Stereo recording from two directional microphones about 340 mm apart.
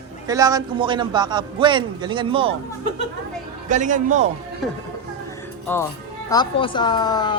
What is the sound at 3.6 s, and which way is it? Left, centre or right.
Speech, right.